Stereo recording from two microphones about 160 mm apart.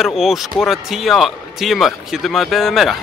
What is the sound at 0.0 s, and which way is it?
Speech, centre (ahead or behind).